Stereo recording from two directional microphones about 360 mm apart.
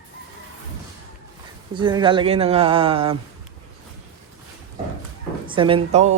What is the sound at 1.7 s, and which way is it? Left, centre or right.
A man's voice, centre.